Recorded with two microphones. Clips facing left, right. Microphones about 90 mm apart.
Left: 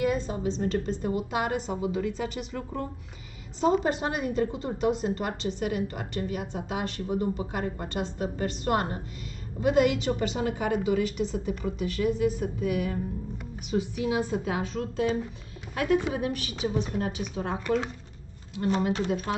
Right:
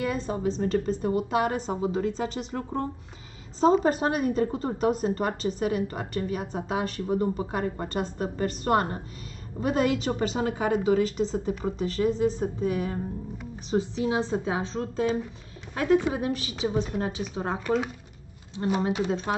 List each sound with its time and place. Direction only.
0.1 s a woman's voice: 40° right (ahead or behind)
19.0 s speech: 30° right (ahead or behind)